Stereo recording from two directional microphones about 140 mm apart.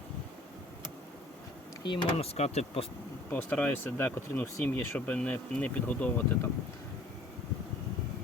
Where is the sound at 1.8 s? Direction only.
35° left (ahead or behind).